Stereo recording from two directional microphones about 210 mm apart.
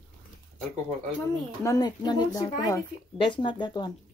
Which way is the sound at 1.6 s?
15° left (ahead or behind).